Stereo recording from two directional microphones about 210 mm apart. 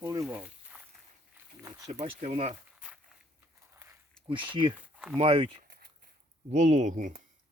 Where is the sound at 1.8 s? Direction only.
30° right (ahead or behind).